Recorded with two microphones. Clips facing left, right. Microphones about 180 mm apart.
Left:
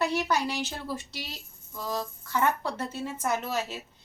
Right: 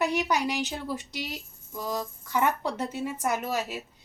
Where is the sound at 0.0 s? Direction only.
15° right (ahead or behind).